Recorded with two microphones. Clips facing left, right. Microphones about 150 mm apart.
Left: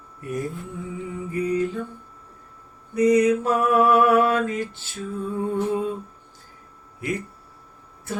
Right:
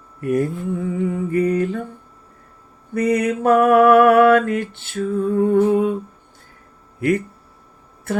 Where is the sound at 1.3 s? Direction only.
65° right (ahead or behind).